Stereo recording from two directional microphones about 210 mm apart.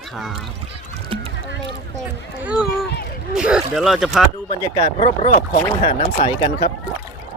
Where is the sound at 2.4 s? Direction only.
5° right (ahead or behind).